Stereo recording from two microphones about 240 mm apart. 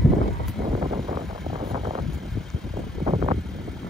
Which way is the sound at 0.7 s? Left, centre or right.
Centre.